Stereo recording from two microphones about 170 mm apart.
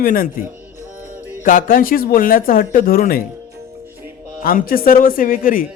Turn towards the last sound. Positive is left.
turn(degrees=55)  # may be behind; listen again after turning